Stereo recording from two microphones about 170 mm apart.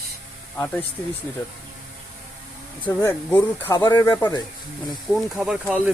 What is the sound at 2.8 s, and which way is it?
Speech, 10° left (ahead or behind).